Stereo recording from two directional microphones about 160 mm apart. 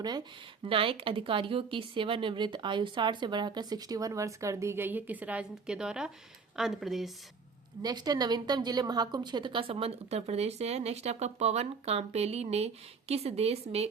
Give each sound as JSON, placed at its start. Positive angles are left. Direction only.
{"t": 0.6, "sound": "speech", "side_deg": -35}
{"t": 7.8, "sound": "a woman's voice", "side_deg": -25}